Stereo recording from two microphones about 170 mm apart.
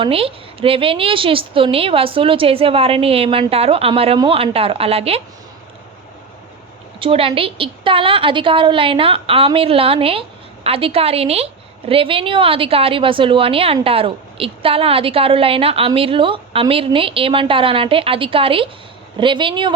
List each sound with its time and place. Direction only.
0.0 s a woman's voice: 35° right (ahead or behind)
7.0 s a woman's voice: 35° right (ahead or behind)